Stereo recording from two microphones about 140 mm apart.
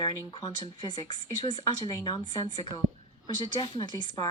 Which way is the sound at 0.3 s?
30° left (ahead or behind).